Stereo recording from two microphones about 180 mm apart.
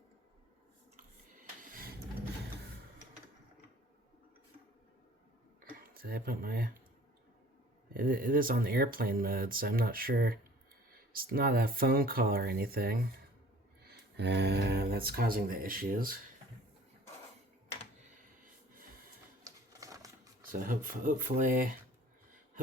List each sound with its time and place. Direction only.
1.7 s a sound: 55° right (ahead or behind)
5.7 s speech: 55° right (ahead or behind)
7.9 s speech: 50° right (ahead or behind)
13.8 s speech: 70° right (ahead or behind); by 16.1 s 55° right (ahead or behind)
19.5 s a sound: 20° right (ahead or behind)
20.5 s speech: 50° right (ahead or behind)